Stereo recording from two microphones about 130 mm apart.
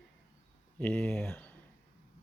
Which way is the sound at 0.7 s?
10° left (ahead or behind).